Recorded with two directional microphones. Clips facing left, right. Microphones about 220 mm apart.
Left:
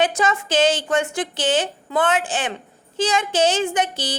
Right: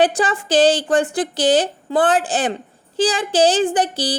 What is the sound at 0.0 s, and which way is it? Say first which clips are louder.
A woman's voice: right 3 dB; 35° right (ahead or behind).